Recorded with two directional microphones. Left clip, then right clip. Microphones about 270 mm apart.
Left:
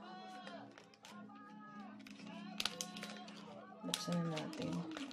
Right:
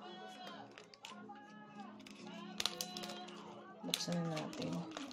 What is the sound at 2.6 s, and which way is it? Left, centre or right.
Music, centre.